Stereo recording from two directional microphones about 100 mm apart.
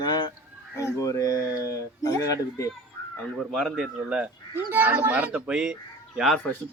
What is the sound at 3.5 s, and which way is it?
Speech, 5° right (ahead or behind).